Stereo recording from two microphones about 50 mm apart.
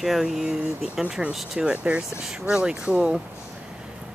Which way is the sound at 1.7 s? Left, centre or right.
Right.